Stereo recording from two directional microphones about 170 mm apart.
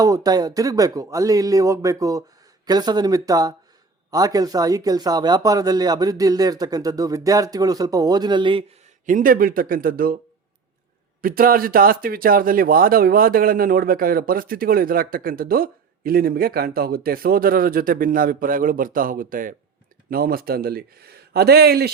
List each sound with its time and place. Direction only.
0.0 s speech: 20° right (ahead or behind)
9.0 s speech: 55° right (ahead or behind)
11.2 s speech: 55° right (ahead or behind)